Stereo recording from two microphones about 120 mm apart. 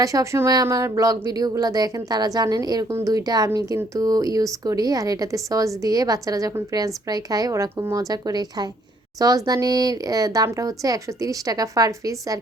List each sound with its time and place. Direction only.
0.0 s speech: 25° right (ahead or behind)